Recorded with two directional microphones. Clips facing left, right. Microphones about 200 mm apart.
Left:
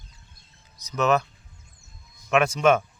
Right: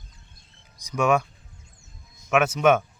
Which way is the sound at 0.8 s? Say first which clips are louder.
Right 1 dB; 10° right (ahead or behind).